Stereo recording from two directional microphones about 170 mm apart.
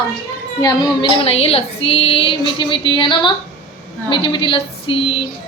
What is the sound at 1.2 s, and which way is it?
Female singing, 35° left (ahead or behind).